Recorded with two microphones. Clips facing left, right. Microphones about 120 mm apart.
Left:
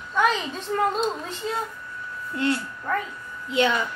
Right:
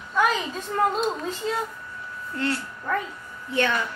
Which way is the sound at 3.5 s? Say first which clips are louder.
Left 2 dB; 15° left (ahead or behind).